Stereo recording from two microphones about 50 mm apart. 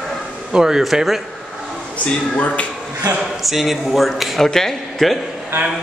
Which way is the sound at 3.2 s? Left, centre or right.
Centre.